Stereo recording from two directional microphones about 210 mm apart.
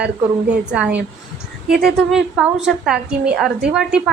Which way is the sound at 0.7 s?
5° right (ahead or behind).